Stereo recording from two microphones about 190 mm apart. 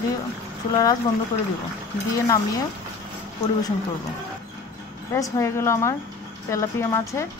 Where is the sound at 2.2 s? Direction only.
20° left (ahead or behind).